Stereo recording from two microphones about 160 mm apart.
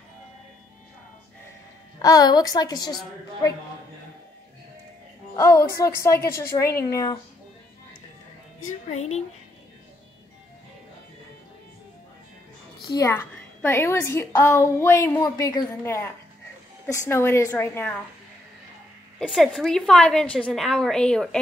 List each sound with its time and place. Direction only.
2.0 s a woman's voice: 25° left (ahead or behind)
5.3 s a woman's voice: 20° left (ahead or behind)
8.9 s a woman's voice: 45° left (ahead or behind)
12.8 s a woman's voice: 20° left (ahead or behind)
19.1 s a woman's voice: 5° left (ahead or behind)